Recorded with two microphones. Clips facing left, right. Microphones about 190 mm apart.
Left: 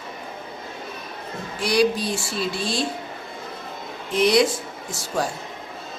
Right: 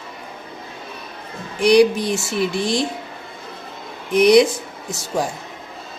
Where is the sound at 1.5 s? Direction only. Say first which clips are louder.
Right 7 dB; 15° right (ahead or behind).